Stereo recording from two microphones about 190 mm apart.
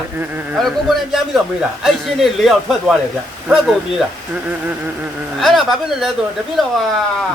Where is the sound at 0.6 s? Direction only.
Centre (ahead or behind).